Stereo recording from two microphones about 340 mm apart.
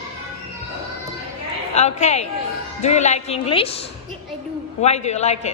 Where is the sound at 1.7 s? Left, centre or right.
Centre.